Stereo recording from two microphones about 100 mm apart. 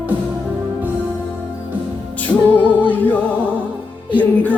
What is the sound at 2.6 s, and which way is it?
Music, 15° left (ahead or behind).